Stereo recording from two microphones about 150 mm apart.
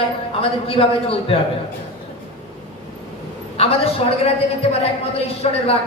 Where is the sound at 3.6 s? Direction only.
40° left (ahead or behind).